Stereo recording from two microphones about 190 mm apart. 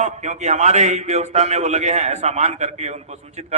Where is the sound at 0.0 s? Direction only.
40° right (ahead or behind).